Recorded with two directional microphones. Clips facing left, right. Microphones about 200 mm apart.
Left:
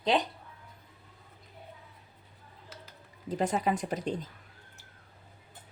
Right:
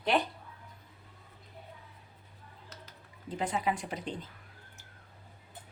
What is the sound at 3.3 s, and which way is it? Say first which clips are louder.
Speech: left 4 dB; 40° left (ahead or behind).